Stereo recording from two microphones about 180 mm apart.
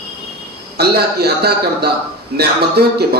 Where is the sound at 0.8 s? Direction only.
65° right (ahead or behind).